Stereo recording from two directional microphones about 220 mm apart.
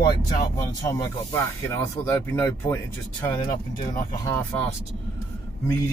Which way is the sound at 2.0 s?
10° left (ahead or behind).